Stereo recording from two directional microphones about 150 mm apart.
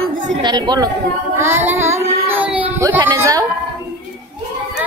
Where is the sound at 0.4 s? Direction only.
30° right (ahead or behind).